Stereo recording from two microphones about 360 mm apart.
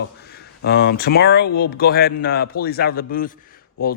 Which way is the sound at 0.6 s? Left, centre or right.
Left.